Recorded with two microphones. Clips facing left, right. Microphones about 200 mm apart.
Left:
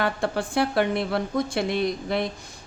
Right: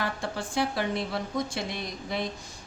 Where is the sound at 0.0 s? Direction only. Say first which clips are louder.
Left 7 dB; 60° left (ahead or behind).